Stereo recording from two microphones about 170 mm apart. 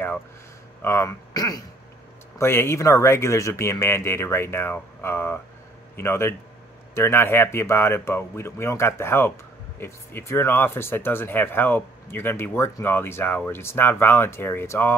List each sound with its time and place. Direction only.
0.8 s speech: 15° left (ahead or behind)